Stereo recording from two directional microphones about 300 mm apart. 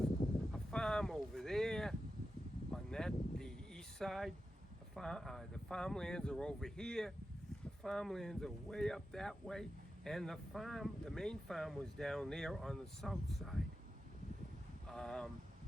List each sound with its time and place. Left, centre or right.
0.5 s vehicle: centre
2.7 s a sound: centre
4.9 s speech: centre
14.8 s speech: centre